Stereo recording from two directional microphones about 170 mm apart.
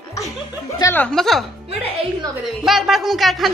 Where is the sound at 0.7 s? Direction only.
15° left (ahead or behind).